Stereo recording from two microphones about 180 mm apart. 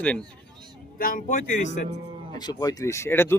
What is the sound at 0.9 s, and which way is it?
Speech, 50° left (ahead or behind).